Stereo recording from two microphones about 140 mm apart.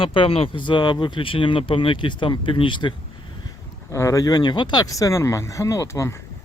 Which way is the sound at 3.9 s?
20° left (ahead or behind).